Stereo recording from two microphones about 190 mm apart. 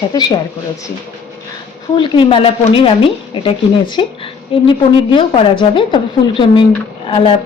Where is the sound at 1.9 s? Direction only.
25° left (ahead or behind).